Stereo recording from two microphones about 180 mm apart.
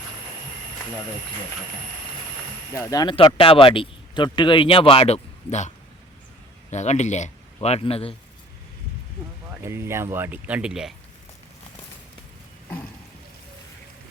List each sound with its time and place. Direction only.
2.7 s speech: 20° left (ahead or behind)
9.6 s speech: 15° right (ahead or behind)